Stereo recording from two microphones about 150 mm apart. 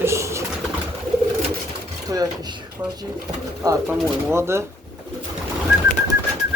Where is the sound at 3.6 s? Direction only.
25° right (ahead or behind).